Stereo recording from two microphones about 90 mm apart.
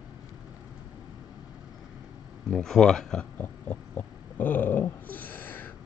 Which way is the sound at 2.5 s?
5° left (ahead or behind).